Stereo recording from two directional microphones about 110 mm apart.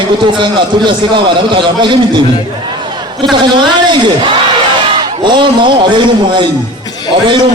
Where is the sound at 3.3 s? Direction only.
45° right (ahead or behind).